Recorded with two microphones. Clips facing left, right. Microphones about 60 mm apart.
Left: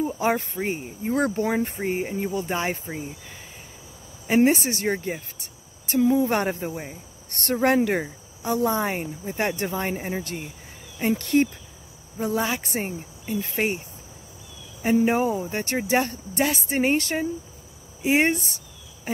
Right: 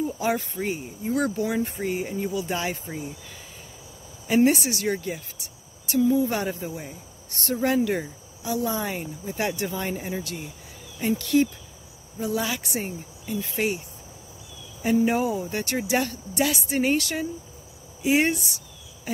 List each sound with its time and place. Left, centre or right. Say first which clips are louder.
0.0 s a sound: left 2 dB; left
0.6 s speech: left 1 dB; left
1.8 s speech: left 1 dB; left
4.3 s speech: left 1 dB; left
15.0 s speech: left 2 dB; left
19.1 s cricket: left 2 dB; left